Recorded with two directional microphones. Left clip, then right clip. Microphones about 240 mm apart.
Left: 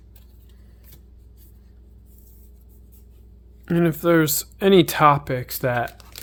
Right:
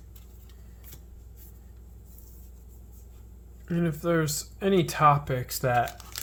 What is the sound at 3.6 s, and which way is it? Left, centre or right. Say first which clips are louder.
Speech: left 9 dB; left.